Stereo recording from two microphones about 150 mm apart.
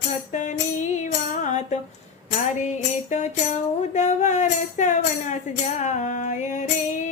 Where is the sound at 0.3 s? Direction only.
55° left (ahead or behind).